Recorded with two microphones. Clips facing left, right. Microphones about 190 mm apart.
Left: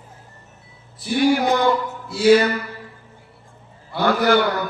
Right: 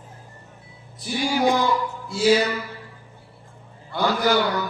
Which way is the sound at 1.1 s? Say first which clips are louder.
Left 4 dB; 60° left (ahead or behind).